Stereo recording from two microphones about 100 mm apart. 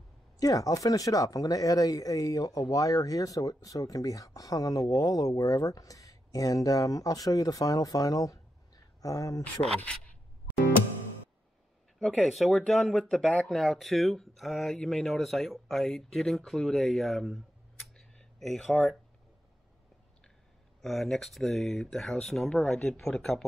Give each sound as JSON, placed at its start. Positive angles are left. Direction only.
{"t": 0.4, "sound": "speech", "side_deg": 35}
{"t": 12.0, "sound": "speech", "side_deg": 0}
{"t": 20.8, "sound": "speech", "side_deg": 0}